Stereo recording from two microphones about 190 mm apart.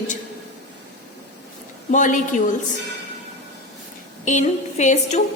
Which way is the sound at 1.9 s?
40° left (ahead or behind).